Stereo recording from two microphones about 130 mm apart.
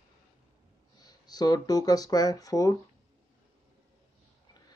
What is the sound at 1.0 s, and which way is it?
Speech, 30° left (ahead or behind).